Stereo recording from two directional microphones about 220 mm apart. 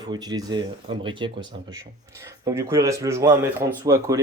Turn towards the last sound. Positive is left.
turn(degrees=-15)  # may be behind; listen again after turning